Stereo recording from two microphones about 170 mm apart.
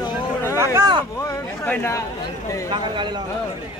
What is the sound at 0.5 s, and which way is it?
Speech, 15° right (ahead or behind).